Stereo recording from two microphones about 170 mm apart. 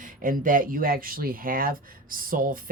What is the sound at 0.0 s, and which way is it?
Speech, 50° right (ahead or behind).